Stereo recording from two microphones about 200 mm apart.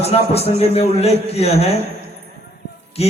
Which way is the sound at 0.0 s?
30° left (ahead or behind).